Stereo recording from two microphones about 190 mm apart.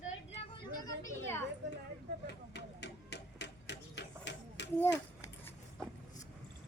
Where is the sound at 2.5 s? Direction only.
60° left (ahead or behind).